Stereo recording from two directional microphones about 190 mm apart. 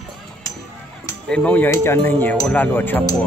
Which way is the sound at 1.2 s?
5° left (ahead or behind).